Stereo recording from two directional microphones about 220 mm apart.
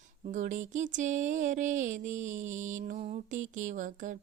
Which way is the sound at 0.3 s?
35° right (ahead or behind).